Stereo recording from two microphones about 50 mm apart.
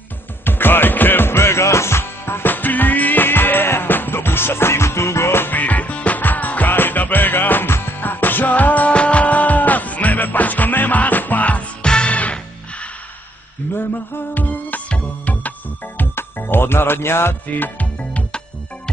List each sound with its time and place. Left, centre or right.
0.5 s music: left
5.5 s music: left
11.8 s music: centre
13.7 s music: left
16.3 s speech: left
17.7 s music: left